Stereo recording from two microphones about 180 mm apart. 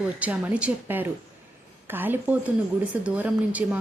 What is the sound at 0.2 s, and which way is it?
Speech, 10° right (ahead or behind).